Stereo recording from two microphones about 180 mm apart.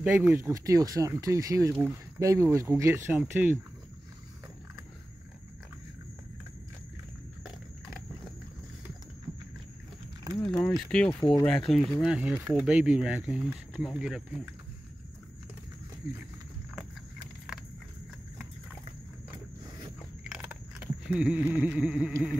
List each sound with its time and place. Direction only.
0.0 s speech: 15° right (ahead or behind)
10.3 s speech: 5° left (ahead or behind)
20.2 s a sound: 5° right (ahead or behind)